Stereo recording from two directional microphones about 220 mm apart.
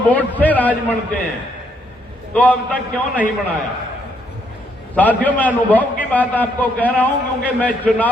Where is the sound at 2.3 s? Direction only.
5° left (ahead or behind).